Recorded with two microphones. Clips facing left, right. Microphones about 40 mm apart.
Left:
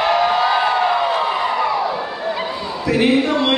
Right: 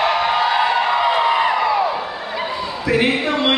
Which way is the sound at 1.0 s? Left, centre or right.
Right.